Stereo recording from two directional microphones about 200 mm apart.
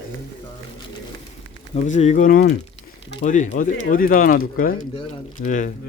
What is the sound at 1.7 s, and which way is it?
Speech, 35° left (ahead or behind).